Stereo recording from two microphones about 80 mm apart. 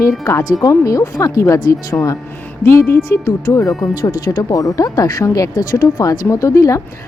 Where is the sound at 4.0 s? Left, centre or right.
Left.